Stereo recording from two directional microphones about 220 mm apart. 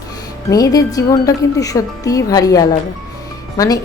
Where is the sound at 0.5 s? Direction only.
15° left (ahead or behind).